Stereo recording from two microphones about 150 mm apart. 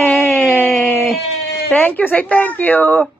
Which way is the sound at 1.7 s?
10° left (ahead or behind).